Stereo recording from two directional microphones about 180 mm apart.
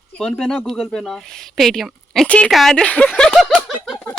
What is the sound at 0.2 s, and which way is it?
Speech, 5° left (ahead or behind).